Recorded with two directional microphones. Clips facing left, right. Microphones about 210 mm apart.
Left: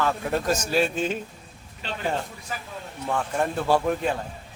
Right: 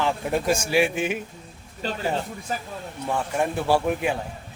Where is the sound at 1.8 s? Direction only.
40° right (ahead or behind).